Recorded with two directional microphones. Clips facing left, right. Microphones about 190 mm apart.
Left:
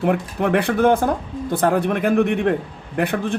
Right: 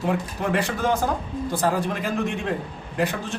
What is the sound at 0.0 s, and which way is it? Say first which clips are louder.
Speech: left 5 dB; 60° left (ahead or behind).